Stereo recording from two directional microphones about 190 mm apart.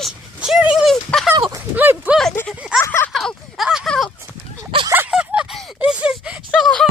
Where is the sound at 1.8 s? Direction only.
10° right (ahead or behind).